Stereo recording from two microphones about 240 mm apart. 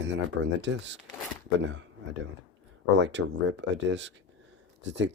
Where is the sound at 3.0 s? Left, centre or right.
Right.